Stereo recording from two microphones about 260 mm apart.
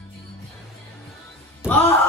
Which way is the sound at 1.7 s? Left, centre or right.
Centre.